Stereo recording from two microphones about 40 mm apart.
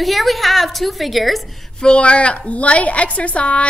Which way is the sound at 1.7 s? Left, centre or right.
Left.